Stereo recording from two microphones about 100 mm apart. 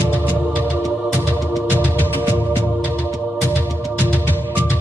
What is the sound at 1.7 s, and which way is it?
Music, 20° left (ahead or behind).